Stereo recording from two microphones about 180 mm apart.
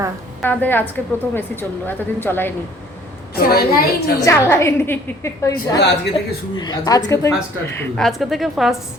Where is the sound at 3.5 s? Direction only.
55° left (ahead or behind).